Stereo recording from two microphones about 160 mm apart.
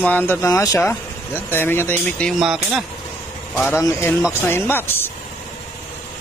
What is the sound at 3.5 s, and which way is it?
Speech, 15° left (ahead or behind).